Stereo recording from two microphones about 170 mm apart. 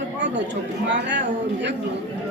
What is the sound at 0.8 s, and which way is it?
Speech, 90° right.